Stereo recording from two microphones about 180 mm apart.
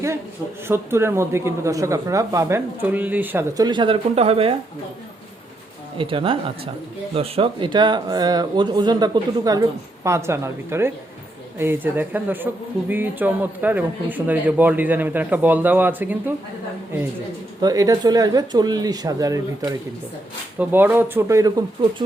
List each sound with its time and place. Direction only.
0.7 s speech: 15° right (ahead or behind)
3.6 s speech: 25° right (ahead or behind)
6.0 s speech: 30° right (ahead or behind); by 16.3 s 10° right (ahead or behind)
17.6 s speech: 20° right (ahead or behind)